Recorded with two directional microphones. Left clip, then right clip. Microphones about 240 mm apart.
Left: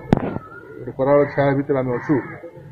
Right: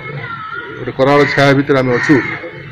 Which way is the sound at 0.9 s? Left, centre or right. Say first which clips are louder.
Right 6 dB; centre.